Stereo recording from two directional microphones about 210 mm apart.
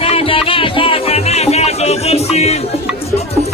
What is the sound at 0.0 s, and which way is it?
Music, 25° left (ahead or behind).